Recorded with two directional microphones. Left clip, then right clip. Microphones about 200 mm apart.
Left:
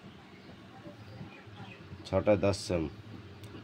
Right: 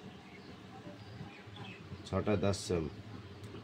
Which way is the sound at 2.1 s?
30° left (ahead or behind).